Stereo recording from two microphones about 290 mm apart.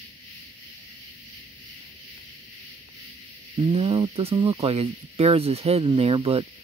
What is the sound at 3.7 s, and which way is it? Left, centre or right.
Speech, centre.